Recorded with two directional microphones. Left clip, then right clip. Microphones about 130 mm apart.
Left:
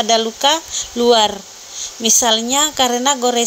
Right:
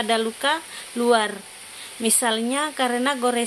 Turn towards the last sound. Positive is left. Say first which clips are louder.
# left 6 dB
turn(degrees=20)  # may be behind; listen again after turning